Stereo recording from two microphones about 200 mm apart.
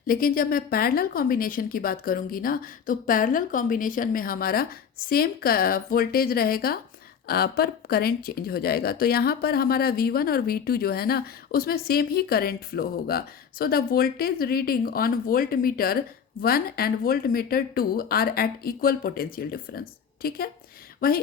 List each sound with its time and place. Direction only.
0.1 s speech: 45° left (ahead or behind)